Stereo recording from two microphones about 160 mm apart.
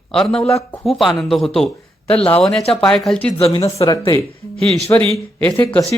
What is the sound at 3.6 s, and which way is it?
Speech, 20° left (ahead or behind).